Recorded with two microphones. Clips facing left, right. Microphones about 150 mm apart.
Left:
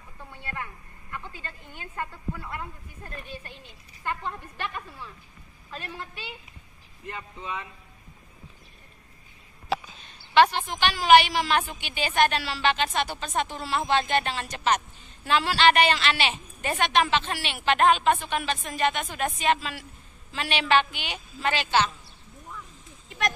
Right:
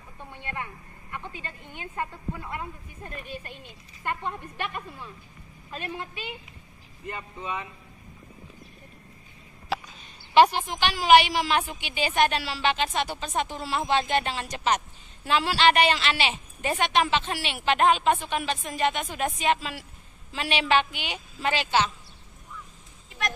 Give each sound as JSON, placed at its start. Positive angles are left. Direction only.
{"t": 0.2, "sound": "speech", "side_deg": -20}
{"t": 4.0, "sound": "a woman's voice", "side_deg": -15}
{"t": 7.1, "sound": "a woman's voice", "side_deg": 0}
{"t": 10.3, "sound": "a woman's voice", "side_deg": -10}